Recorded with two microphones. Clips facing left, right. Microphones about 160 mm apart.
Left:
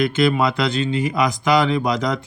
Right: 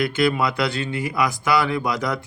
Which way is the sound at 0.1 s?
20° left (ahead or behind).